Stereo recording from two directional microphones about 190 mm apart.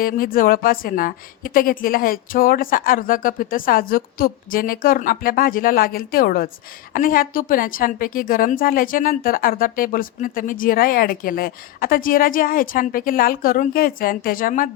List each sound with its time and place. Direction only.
0.0 s a woman's voice: 50° left (ahead or behind)